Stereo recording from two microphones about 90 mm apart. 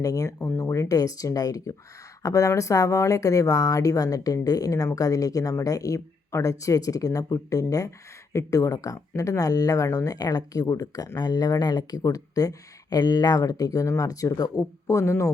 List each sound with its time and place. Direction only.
0.0 s speech: 40° left (ahead or behind)